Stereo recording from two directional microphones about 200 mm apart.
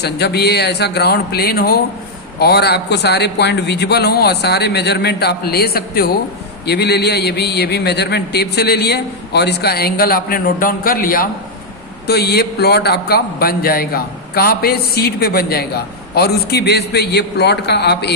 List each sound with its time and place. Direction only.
0.0 s a man's voice: 55° left (ahead or behind)